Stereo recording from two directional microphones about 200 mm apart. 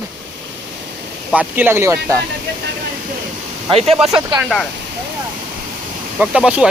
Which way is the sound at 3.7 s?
30° right (ahead or behind).